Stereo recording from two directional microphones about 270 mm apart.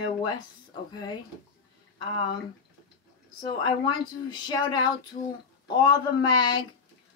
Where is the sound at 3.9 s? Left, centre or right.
Centre.